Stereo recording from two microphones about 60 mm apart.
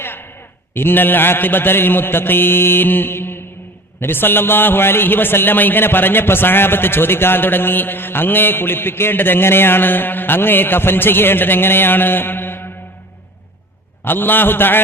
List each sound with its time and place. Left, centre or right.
0.0 s a sound: left
0.7 s a man's voice: left
14.0 s a man's voice: left